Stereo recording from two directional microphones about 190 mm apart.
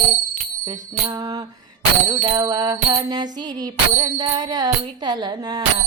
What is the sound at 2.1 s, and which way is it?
Speech, 20° right (ahead or behind).